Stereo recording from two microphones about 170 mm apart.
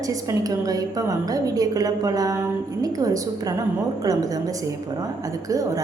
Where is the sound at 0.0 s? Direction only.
20° right (ahead or behind).